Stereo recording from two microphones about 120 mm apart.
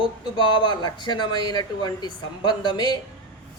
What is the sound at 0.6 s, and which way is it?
A woman's voice, 40° left (ahead or behind).